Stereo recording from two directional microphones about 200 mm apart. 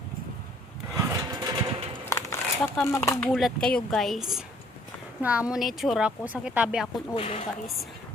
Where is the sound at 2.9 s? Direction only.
15° left (ahead or behind).